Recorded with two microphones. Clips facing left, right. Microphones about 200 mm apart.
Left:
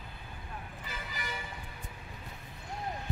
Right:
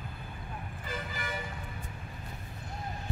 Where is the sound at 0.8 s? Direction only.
50° right (ahead or behind).